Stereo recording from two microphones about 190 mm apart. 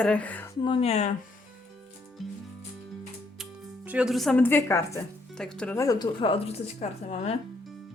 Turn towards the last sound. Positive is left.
turn(degrees=35)  # may be behind; listen again after turning